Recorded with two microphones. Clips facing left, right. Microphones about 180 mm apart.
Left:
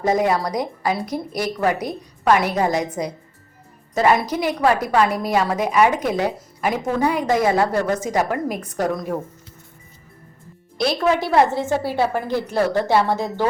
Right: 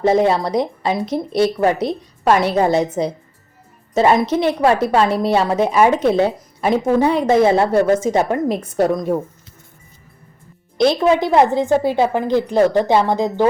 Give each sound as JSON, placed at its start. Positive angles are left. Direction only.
{"t": 0.0, "sound": "a woman's voice", "side_deg": -25}
{"t": 10.8, "sound": "a woman's voice", "side_deg": -20}